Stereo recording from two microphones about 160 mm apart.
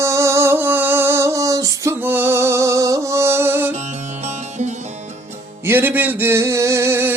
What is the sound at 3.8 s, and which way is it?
Music, 45° right (ahead or behind).